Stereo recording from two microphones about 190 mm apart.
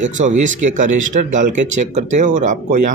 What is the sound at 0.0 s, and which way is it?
Speech, 40° right (ahead or behind).